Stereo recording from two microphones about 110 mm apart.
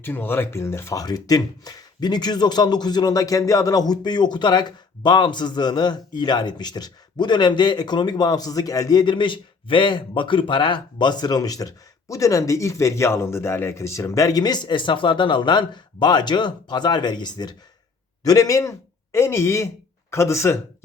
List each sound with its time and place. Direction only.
0.0 s speech: 20° left (ahead or behind)